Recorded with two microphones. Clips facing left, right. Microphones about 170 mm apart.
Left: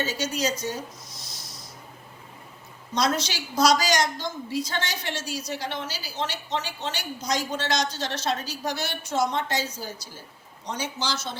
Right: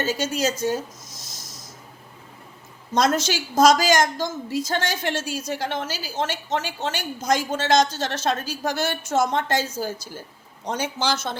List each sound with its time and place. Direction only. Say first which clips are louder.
0.0 s a woman's voice: right 4 dB; 50° right (ahead or behind)
0.3 s a sound: right 4 dB; 50° right (ahead or behind)
2.9 s a woman's voice: right 5 dB; 50° right (ahead or behind)